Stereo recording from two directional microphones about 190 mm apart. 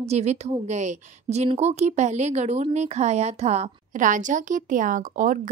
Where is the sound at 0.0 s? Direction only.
35° right (ahead or behind).